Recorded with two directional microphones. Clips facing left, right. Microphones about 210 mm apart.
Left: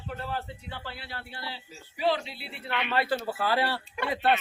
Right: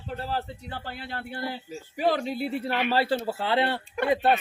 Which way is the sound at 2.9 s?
30° right (ahead or behind).